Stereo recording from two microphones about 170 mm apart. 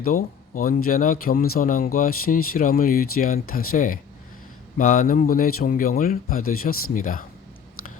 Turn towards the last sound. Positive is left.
turn(degrees=55)  # may be behind; listen again after turning